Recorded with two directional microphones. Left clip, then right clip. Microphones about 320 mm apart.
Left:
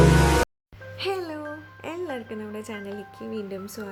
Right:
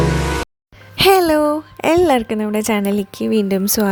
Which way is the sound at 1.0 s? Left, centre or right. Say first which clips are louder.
Right 18 dB; right.